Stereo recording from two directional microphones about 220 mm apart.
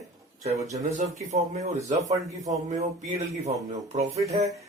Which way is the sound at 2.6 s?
30° right (ahead or behind).